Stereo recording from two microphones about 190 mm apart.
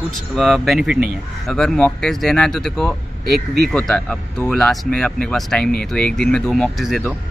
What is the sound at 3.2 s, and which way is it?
Speech, 60° right (ahead or behind).